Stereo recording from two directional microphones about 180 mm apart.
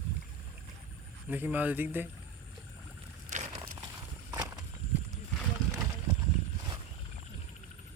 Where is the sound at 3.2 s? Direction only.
40° right (ahead or behind).